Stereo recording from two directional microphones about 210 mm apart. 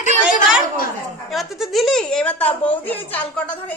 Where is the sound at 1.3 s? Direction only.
Centre (ahead or behind).